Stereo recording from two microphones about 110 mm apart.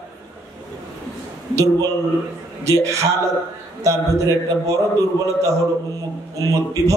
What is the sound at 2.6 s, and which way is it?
A man's voice, 30° right (ahead or behind).